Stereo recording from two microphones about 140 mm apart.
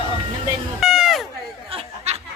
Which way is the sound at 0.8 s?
5° right (ahead or behind).